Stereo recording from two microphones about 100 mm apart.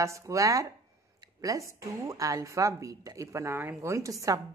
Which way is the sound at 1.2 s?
35° right (ahead or behind).